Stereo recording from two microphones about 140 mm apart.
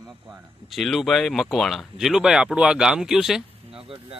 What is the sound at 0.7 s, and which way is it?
Speech, centre (ahead or behind).